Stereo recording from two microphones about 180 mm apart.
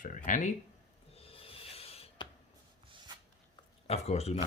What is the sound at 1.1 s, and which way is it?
Music, 30° left (ahead or behind).